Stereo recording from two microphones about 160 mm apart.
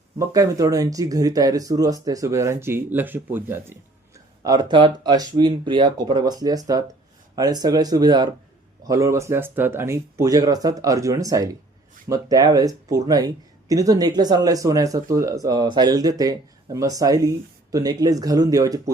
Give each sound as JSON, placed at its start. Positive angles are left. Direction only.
{"t": 0.2, "sound": "speech", "side_deg": -20}
{"t": 4.4, "sound": "speech", "side_deg": -25}